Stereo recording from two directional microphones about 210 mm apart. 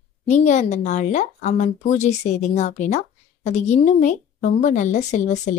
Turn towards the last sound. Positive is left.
turn(degrees=35)  # may be behind; listen again after turning